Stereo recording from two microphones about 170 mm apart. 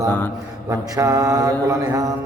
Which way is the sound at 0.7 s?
20° right (ahead or behind).